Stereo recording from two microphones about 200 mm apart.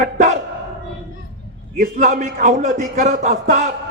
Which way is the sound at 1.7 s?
40° right (ahead or behind).